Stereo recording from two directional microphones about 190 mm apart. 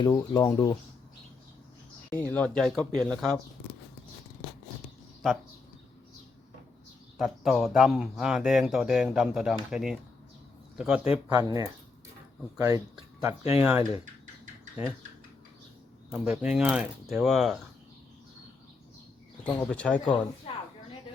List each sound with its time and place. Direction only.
0.0 s speech: 20° left (ahead or behind)
2.0 s speech: 10° left (ahead or behind)
7.2 s speech: centre (ahead or behind)
11.3 s speech: 20° right (ahead or behind)
16.1 s speech: 5° right (ahead or behind)
19.5 s speech: 5° left (ahead or behind)
20.5 s a woman's voice: 30° left (ahead or behind)